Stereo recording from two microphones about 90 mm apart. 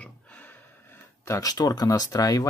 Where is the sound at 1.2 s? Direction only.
40° left (ahead or behind).